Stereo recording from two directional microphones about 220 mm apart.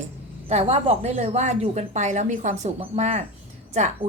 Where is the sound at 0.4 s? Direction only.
25° right (ahead or behind).